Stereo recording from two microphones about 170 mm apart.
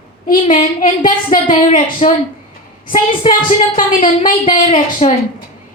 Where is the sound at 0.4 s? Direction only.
50° left (ahead or behind).